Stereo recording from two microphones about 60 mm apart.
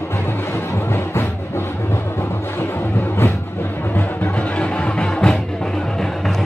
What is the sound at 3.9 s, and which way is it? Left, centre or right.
Music, left.